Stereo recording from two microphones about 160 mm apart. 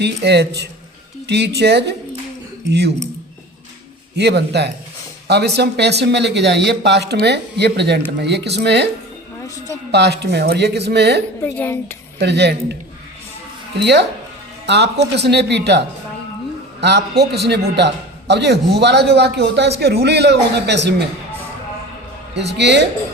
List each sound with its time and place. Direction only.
0.0 s a man's voice: 90° right
4.2 s a man's voice: 90° right
9.9 s a man's voice: 90° right
11.4 s speech: 10° left (ahead or behind)
12.2 s a man's voice: 90° right
13.7 s a man's voice: 90° right
16.8 s a man's voice: 90° right
22.5 s a man's voice: 90° right